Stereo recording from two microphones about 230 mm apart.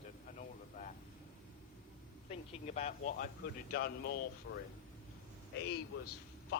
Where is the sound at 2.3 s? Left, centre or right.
Left.